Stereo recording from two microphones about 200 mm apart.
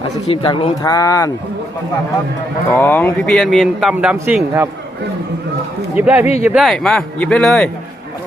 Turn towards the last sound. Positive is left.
turn(degrees=5)  # may be behind; listen again after turning